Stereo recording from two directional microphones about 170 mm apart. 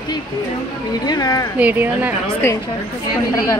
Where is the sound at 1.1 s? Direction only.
20° left (ahead or behind).